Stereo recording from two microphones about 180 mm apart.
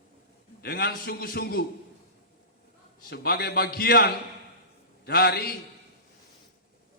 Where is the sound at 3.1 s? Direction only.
60° left (ahead or behind).